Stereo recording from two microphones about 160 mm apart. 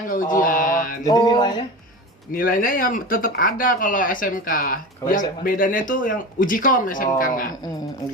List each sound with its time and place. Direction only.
0.1 s speech: 55° left (ahead or behind)
0.4 s mantra: 60° left (ahead or behind)
1.0 s mantra: 25° left (ahead or behind)
2.3 s speech: 60° left (ahead or behind)